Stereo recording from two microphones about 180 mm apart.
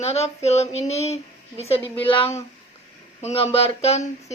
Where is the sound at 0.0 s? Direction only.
35° left (ahead or behind).